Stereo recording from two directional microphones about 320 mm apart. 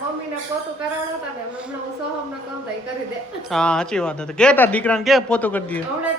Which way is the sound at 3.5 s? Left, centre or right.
Centre.